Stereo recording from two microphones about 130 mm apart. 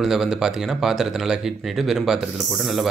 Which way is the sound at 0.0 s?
5° right (ahead or behind).